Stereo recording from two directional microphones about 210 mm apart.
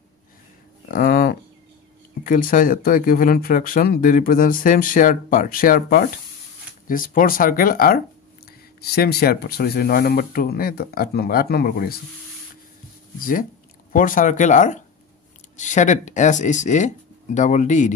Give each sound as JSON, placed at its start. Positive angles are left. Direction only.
{"t": 0.8, "sound": "a sound", "side_deg": 45}
{"t": 2.2, "sound": "speech", "side_deg": 40}
{"t": 13.2, "sound": "speech", "side_deg": 40}